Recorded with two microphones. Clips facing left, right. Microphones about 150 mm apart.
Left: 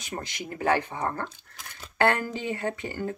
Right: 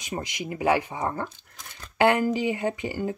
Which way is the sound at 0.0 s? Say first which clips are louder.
Right 3 dB; 15° right (ahead or behind).